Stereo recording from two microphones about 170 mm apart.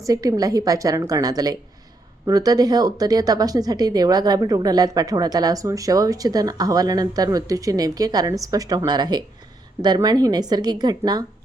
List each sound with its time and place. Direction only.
0.0 s a woman's voice: 20° right (ahead or behind)